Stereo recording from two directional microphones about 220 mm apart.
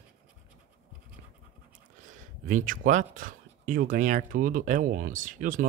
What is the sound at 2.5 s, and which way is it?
Speech, 35° right (ahead or behind).